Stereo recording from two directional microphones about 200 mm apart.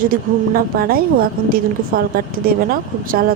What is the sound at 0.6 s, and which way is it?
A woman's voice, 50° right (ahead or behind).